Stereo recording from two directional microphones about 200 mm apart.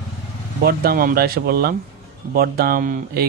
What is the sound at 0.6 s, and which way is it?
Speech, 50° right (ahead or behind).